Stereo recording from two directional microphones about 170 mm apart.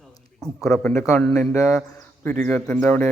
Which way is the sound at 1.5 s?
15° left (ahead or behind).